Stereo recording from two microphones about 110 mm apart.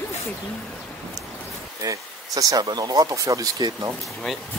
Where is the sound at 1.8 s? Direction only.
30° right (ahead or behind).